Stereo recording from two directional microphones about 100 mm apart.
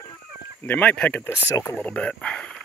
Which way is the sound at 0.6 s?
15° left (ahead or behind).